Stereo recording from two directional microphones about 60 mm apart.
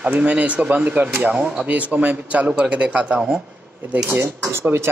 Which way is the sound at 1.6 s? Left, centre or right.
Right.